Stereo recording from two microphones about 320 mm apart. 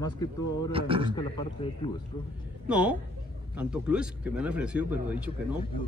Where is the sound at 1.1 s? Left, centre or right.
Centre.